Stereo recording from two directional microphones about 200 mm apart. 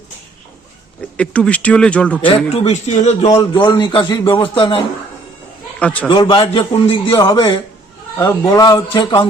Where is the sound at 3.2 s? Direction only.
20° left (ahead or behind).